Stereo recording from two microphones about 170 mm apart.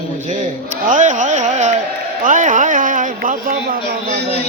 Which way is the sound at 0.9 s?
45° right (ahead or behind).